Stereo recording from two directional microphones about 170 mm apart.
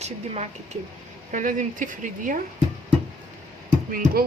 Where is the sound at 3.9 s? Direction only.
60° right (ahead or behind).